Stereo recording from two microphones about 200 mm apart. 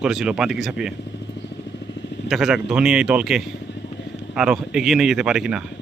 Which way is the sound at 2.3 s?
Centre (ahead or behind).